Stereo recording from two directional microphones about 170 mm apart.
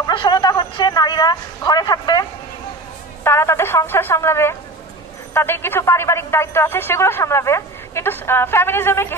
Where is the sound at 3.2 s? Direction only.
15° left (ahead or behind).